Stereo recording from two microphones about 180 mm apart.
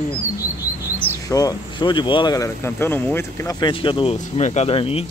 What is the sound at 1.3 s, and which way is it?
Speech, 20° left (ahead or behind).